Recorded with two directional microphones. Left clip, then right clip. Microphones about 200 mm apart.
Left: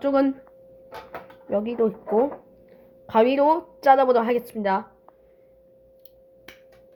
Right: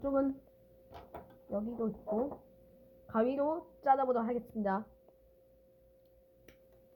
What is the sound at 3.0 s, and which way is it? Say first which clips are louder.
A woman's voice: left 14 dB; 25° left (ahead or behind).